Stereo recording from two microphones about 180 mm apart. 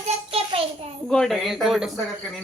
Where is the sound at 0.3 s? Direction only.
35° right (ahead or behind).